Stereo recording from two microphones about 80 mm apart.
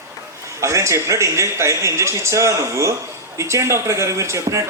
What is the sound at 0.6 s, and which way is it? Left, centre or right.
Speech, right.